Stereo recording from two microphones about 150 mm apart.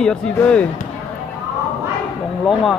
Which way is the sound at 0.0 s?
5° left (ahead or behind).